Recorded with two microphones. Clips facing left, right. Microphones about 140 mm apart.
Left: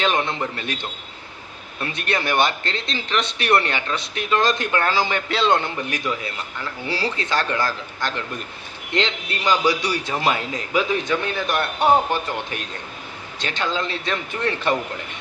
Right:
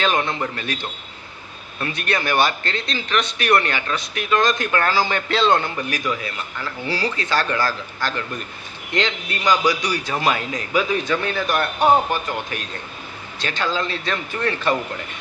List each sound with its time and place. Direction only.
0.3 s speech: 20° left (ahead or behind)
1.8 s speech: 25° left (ahead or behind)
5.6 s speech: 25° left (ahead or behind)